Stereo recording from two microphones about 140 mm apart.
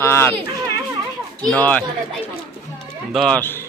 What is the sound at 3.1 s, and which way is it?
Speech, centre (ahead or behind).